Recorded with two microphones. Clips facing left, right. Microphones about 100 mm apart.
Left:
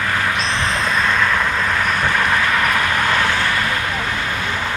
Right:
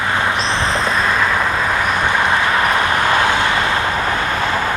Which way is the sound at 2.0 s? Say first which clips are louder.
Right 2 dB; 20° right (ahead or behind).